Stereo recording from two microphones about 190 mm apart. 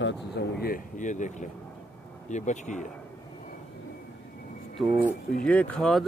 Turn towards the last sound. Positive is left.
turn(degrees=5)  # may be behind; listen again after turning